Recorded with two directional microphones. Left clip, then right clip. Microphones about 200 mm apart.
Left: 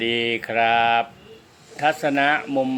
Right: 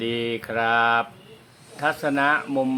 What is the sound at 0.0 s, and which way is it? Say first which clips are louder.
Speech: left 4 dB; 5° right (ahead or behind).